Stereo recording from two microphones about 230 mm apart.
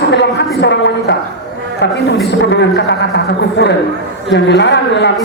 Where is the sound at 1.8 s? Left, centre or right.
Left.